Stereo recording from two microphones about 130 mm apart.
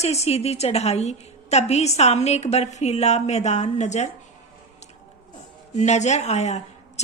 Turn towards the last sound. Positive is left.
turn(degrees=60)  # may be behind; listen again after turning